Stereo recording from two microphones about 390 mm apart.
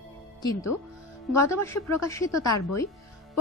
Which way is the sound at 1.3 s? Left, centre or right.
Centre.